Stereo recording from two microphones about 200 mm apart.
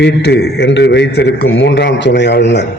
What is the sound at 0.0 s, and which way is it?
A man's voice, 55° left (ahead or behind).